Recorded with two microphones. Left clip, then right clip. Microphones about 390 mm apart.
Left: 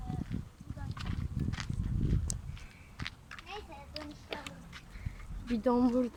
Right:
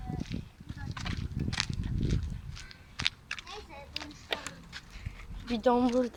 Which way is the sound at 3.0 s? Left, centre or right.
Right.